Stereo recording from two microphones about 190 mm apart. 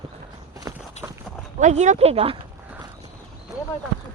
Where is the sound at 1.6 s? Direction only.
40° right (ahead or behind).